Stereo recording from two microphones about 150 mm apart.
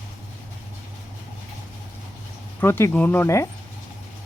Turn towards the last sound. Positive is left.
turn(degrees=15)  # may be behind; listen again after turning